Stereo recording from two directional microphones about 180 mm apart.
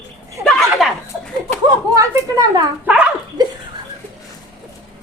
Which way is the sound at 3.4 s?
25° right (ahead or behind).